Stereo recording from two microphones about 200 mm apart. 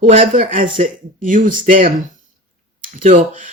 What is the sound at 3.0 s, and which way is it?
Speech, 35° right (ahead or behind).